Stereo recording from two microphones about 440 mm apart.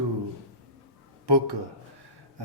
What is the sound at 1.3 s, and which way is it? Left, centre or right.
Speech, right.